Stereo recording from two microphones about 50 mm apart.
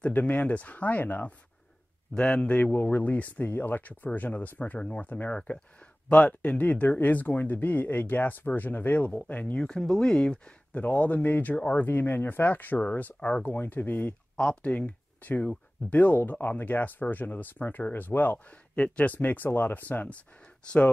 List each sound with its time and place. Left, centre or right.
0.1 s speech: left
2.1 s speech: left
4.7 s speech: left
5.0 s speech: left
9.3 s speech: left
9.6 s speech: centre
10.7 s speech: left
14.3 s speech: centre; by 18.4 s left
18.8 s speech: left
20.6 s speech: left